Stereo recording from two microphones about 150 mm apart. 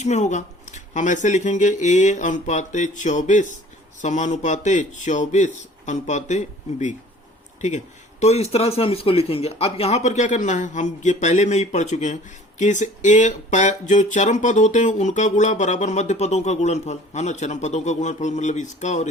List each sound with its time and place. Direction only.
0.0 s speech: 50° left (ahead or behind)
8.2 s speech: 45° left (ahead or behind)